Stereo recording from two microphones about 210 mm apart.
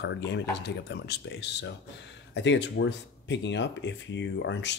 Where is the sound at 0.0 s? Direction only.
55° left (ahead or behind).